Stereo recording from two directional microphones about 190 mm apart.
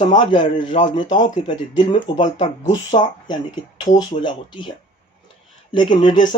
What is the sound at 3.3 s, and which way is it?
Speech, 20° left (ahead or behind).